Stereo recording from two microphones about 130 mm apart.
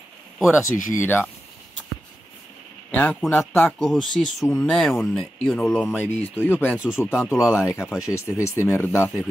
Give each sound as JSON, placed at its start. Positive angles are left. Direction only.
{"t": 0.9, "sound": "speech", "side_deg": 15}
{"t": 2.9, "sound": "a sound", "side_deg": 15}
{"t": 3.3, "sound": "speech", "side_deg": 15}
{"t": 3.8, "sound": "speech", "side_deg": 5}
{"t": 5.9, "sound": "speech", "side_deg": 15}